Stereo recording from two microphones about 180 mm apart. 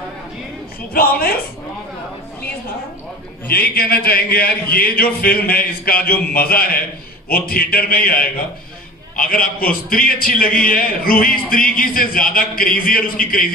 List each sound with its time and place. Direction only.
0.9 s a man's voice: 55° left (ahead or behind)
3.4 s a man's voice: 55° left (ahead or behind)